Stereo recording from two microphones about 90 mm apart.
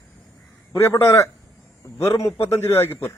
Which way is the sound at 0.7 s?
30° left (ahead or behind).